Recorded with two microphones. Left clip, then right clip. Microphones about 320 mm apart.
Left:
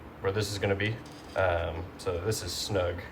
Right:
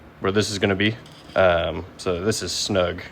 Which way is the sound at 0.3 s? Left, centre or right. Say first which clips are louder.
Right 8 dB; centre.